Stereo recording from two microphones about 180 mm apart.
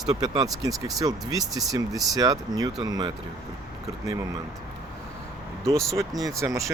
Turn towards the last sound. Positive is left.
turn(degrees=-15)  # may be behind; listen again after turning